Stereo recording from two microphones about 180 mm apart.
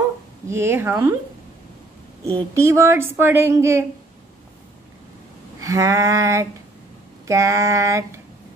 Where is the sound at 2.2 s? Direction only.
15° right (ahead or behind).